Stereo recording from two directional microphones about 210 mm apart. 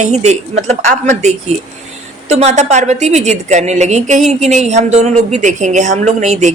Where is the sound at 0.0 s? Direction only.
35° right (ahead or behind).